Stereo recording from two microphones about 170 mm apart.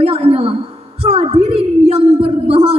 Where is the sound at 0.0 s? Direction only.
35° right (ahead or behind).